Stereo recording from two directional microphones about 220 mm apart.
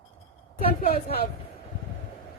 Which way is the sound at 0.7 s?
40° left (ahead or behind).